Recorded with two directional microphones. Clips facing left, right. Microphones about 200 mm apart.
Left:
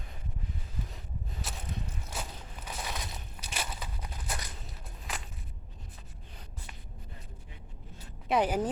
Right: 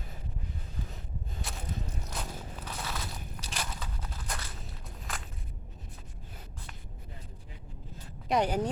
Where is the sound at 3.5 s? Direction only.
10° left (ahead or behind).